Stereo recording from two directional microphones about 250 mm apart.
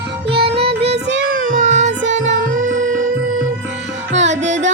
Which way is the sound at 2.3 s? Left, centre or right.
Right.